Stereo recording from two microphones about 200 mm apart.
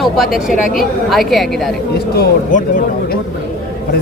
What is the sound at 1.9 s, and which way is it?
Speech, 50° left (ahead or behind).